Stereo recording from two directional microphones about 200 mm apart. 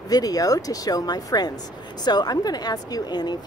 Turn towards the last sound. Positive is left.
turn(degrees=20)  # may be behind; listen again after turning